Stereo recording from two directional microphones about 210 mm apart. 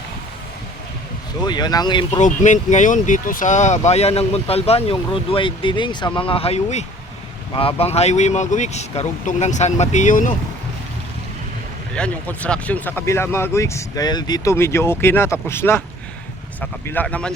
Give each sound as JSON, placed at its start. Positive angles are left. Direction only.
{"t": 1.4, "sound": "speech", "side_deg": 20}
{"t": 11.9, "sound": "speech", "side_deg": 5}